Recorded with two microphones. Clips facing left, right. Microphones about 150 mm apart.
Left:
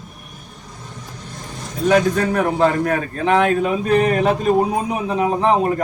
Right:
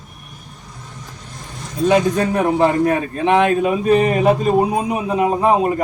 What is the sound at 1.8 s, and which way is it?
A man's voice, 20° right (ahead or behind).